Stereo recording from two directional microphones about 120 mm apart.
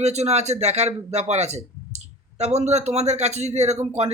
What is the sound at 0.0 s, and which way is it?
A man's voice, 65° right (ahead or behind).